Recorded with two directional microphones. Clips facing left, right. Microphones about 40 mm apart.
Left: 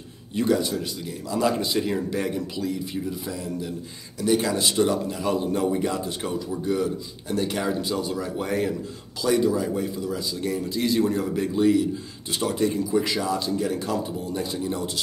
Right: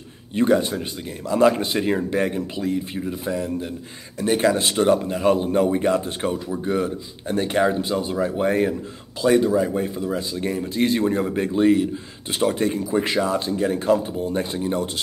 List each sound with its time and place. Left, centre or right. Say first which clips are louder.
0.3 s speech: right 4 dB; right